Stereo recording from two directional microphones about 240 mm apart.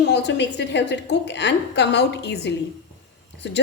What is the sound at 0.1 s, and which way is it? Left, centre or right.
A woman's voice, left.